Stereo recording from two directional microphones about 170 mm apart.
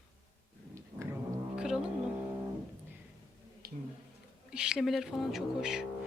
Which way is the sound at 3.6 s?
65° right (ahead or behind).